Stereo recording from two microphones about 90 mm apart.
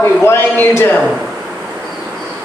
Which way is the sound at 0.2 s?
25° left (ahead or behind).